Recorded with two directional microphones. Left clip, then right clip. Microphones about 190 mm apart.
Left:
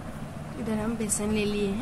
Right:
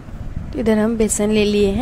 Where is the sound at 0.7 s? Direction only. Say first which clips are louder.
Right 14 dB; 45° right (ahead or behind).